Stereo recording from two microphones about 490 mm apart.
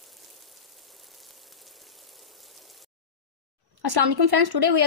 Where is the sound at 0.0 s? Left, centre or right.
Centre.